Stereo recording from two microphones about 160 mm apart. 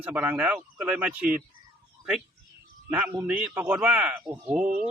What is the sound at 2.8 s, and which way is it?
A man's voice, 10° right (ahead or behind).